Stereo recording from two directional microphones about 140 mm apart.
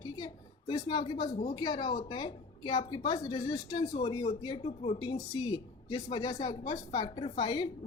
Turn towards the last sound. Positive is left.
turn(degrees=35)  # may be behind; listen again after turning